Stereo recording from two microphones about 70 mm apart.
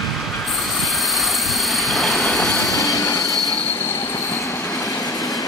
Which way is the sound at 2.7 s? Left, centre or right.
Left.